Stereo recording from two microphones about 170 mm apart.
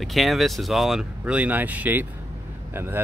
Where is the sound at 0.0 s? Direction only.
Centre (ahead or behind).